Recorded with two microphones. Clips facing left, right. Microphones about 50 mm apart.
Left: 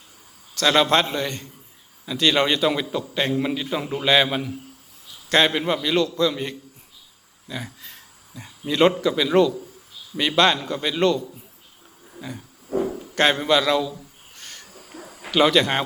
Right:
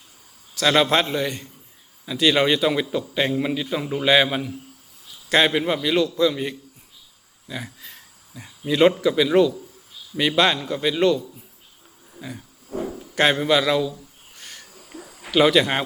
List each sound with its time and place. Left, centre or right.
0.5 s a man's voice: centre
12.7 s a sound: centre
13.1 s a man's voice: centre
14.3 s owl: centre
14.9 s a sound: centre
15.3 s a man's voice: centre